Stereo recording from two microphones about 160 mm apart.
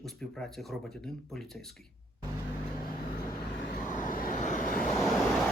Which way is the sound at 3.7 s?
55° left (ahead or behind).